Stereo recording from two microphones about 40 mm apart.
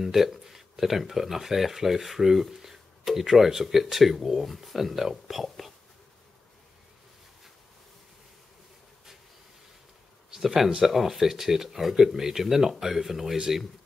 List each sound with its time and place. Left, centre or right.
0.0 s speech: centre
10.3 s speech: centre